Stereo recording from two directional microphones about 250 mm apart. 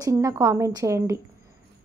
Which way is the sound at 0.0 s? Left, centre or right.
Centre.